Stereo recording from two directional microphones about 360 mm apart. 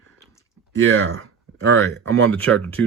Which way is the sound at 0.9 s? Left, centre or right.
Right.